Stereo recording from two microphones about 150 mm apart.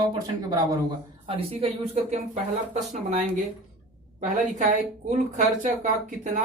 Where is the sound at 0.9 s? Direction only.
40° right (ahead or behind).